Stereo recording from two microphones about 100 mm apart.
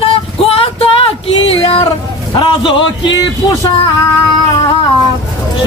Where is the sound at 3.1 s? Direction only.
40° left (ahead or behind).